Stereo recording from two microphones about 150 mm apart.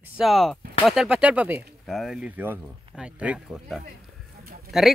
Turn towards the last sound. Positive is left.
turn(degrees=0)  # may be behind; listen again after turning